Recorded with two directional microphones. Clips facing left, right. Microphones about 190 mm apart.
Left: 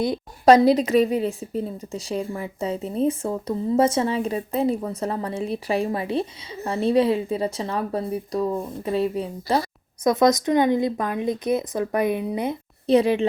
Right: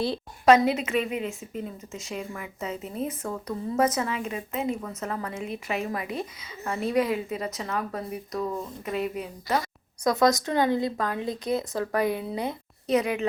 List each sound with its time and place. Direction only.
0.4 s a woman's voice: 35° left (ahead or behind)